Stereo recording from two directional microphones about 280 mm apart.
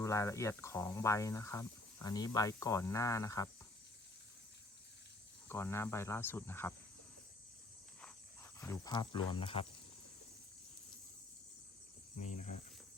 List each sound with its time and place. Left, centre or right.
0.0 s speech: centre
5.5 s speech: centre
8.5 s speech: centre
12.1 s speech: left